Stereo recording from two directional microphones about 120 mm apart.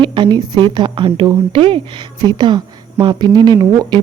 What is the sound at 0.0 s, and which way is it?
Speech, 40° right (ahead or behind).